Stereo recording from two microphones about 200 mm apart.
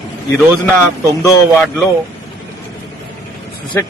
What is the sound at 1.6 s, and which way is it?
Speech, 5° left (ahead or behind).